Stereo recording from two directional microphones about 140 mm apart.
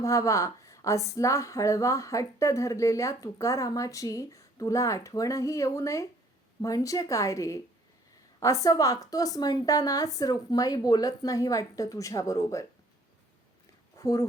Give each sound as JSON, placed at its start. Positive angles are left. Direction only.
{"t": 0.0, "sound": "a woman's voice", "side_deg": 20}
{"t": 14.0, "sound": "speech", "side_deg": 25}